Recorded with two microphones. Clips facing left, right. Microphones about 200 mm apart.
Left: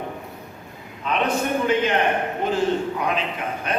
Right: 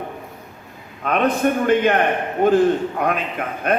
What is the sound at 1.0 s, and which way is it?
A man's voice, 55° right (ahead or behind).